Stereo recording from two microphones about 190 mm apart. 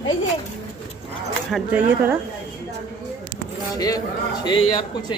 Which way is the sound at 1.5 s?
5° right (ahead or behind).